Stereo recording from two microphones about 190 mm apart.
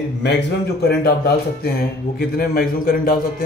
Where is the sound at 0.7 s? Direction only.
55° left (ahead or behind).